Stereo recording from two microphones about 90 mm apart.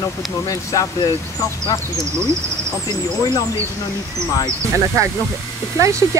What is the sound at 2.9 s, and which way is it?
Speech, 45° left (ahead or behind).